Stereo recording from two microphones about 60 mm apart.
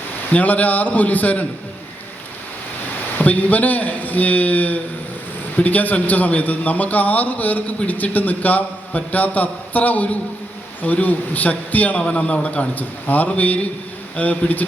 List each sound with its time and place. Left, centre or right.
0.3 s a man's voice: left
3.2 s a man's voice: left